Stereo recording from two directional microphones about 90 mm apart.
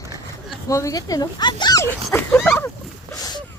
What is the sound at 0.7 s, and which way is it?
Speech, 35° left (ahead or behind).